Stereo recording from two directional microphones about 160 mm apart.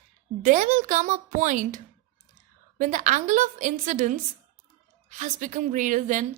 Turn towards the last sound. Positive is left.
turn(degrees=-50)  # may be behind; listen again after turning